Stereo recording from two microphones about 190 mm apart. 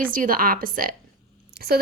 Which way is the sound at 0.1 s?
50° right (ahead or behind).